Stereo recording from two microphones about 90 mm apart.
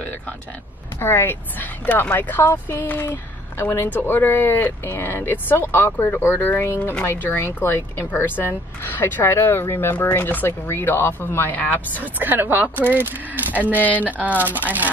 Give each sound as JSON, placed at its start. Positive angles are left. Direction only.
{"t": 1.0, "sound": "speech", "side_deg": 25}
{"t": 12.0, "sound": "speech", "side_deg": -20}
{"t": 13.7, "sound": "speech", "side_deg": 20}
{"t": 14.0, "sound": "speech", "side_deg": -15}